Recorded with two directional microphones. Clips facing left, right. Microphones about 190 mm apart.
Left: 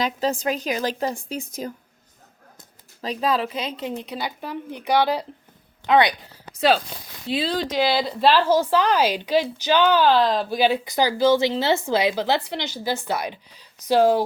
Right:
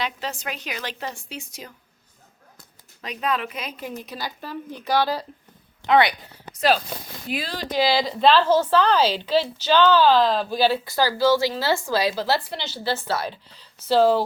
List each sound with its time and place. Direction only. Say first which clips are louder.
0.0 s a woman's voice: left 7 dB; 35° left (ahead or behind)
3.0 s a woman's voice: left 4 dB; 30° left (ahead or behind)
7.3 s a woman's voice: left 6 dB; 25° left (ahead or behind)
8.0 s a woman's voice: right 1 dB; 10° left (ahead or behind)